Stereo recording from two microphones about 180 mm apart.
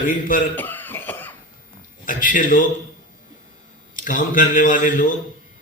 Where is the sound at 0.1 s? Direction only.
50° left (ahead or behind).